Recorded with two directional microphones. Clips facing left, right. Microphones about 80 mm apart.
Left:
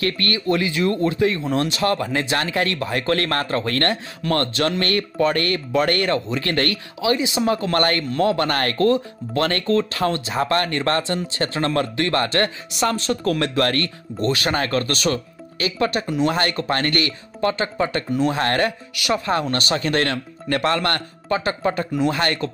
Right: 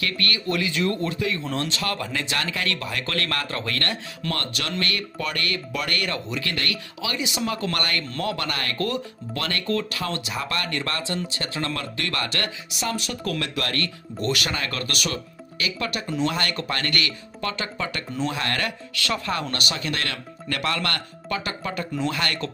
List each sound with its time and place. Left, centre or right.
0.0 s speech: left
7.0 s speech: left
8.5 s speech: left
8.7 s speech: left
14.2 s speech: left
14.5 s speech: left
18.9 s speech: centre